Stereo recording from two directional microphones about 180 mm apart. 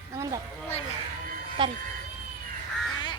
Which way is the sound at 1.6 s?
25° right (ahead or behind).